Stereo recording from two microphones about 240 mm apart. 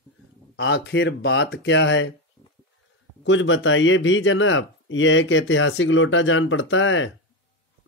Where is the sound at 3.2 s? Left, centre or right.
Left.